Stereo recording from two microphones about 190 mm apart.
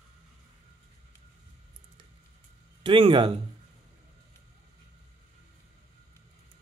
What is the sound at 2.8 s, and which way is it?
Speech, 25° right (ahead or behind).